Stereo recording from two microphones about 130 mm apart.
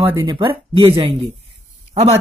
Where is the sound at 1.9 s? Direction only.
55° right (ahead or behind).